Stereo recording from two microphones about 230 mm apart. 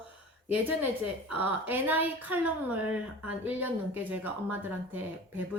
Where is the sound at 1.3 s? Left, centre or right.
Centre.